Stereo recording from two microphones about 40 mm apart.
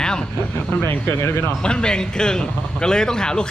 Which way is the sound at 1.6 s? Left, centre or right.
Left.